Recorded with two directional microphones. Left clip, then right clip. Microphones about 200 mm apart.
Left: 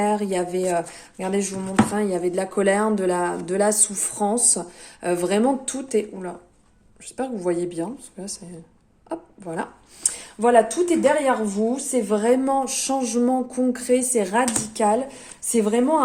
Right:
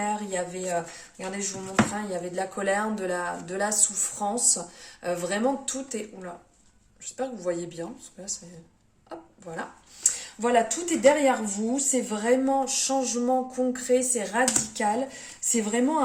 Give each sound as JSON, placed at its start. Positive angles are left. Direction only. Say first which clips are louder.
{"t": 0.0, "sound": "speech", "louder": "left 7 dB", "side_deg": 40}